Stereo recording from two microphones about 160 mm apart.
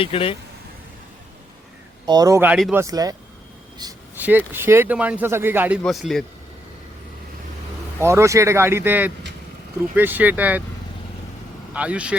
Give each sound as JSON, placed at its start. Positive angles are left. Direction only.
{"t": 0.0, "sound": "speech", "side_deg": 35}
{"t": 2.0, "sound": "speech", "side_deg": -25}
{"t": 4.1, "sound": "speech", "side_deg": -10}
{"t": 5.8, "sound": "speech", "side_deg": 0}
{"t": 7.9, "sound": "speech", "side_deg": -15}
{"t": 11.7, "sound": "speech", "side_deg": -10}